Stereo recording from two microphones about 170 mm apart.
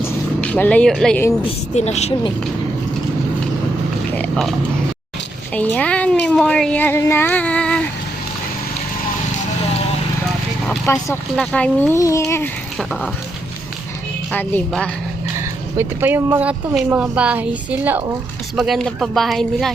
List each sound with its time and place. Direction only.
0.0 s vehicle: 10° left (ahead or behind)
1.7 s speech: 40° left (ahead or behind)
4.1 s speech: 5° left (ahead or behind)
5.5 s speech: 10° left (ahead or behind)
10.7 s speech: 10° left (ahead or behind)
14.3 s speech: 5° left (ahead or behind)
15.4 s speech: 15° right (ahead or behind)